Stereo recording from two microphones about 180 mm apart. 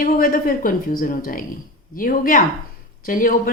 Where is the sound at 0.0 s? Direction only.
50° left (ahead or behind).